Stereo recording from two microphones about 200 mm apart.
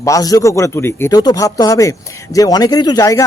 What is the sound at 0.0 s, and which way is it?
Speech, 15° left (ahead or behind).